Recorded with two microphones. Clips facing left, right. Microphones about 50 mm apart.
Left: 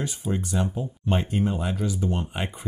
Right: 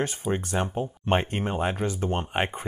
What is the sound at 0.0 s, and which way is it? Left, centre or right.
Speech, right.